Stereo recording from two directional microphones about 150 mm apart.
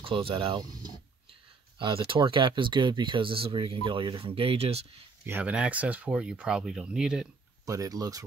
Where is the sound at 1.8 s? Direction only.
35° right (ahead or behind).